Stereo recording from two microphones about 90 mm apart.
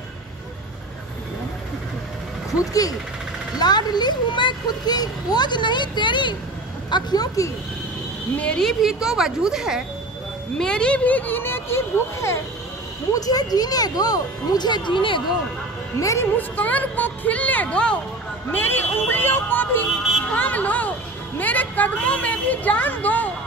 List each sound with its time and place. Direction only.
2.6 s speech: 40° left (ahead or behind)
3.5 s a child's voice: 50° left (ahead or behind)
6.9 s speech: 50° left (ahead or behind)
8.4 s a woman's voice: 10° left (ahead or behind)
8.8 s a woman's voice: 5° right (ahead or behind)
10.6 s speech: 10° left (ahead or behind); by 12.4 s 30° left (ahead or behind)
13.1 s speech: 45° left (ahead or behind); by 15.2 s 65° left (ahead or behind)
16.0 s speech: 35° left (ahead or behind)
16.3 s a woman's voice: 20° left (ahead or behind)
18.5 s speech: 25° left (ahead or behind)
20.2 s music: 15° left (ahead or behind)
21.4 s a woman's voice: 20° left (ahead or behind)